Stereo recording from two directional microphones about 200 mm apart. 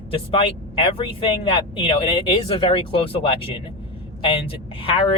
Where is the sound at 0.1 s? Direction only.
30° left (ahead or behind).